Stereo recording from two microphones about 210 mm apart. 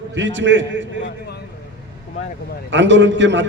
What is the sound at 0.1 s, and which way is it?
Speech, 60° right (ahead or behind).